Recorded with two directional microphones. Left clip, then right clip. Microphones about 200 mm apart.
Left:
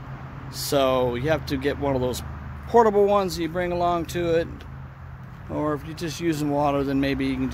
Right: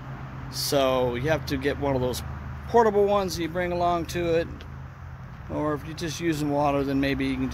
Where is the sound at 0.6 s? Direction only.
15° left (ahead or behind).